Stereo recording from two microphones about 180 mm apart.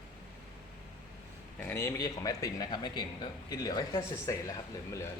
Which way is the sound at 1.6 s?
15° left (ahead or behind).